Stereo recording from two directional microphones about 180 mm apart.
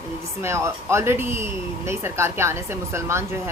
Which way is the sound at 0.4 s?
15° right (ahead or behind).